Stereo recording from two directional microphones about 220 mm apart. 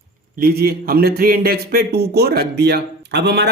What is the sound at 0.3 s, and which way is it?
Speech, 45° right (ahead or behind).